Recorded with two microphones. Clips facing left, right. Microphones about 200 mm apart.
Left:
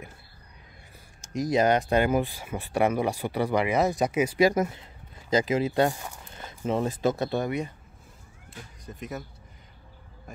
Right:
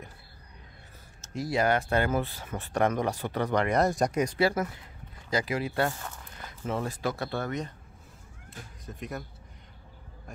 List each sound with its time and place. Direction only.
1.2 s speech: 15° left (ahead or behind)
8.5 s speech: centre (ahead or behind)